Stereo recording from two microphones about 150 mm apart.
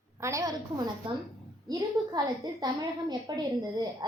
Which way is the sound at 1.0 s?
35° right (ahead or behind).